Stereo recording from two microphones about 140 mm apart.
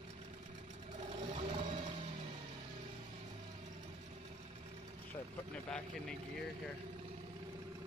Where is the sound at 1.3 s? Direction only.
50° right (ahead or behind).